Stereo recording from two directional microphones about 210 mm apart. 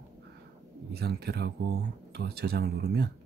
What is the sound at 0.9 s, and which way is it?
Speech, 50° right (ahead or behind).